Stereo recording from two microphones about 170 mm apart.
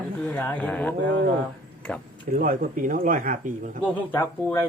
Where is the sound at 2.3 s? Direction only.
55° right (ahead or behind).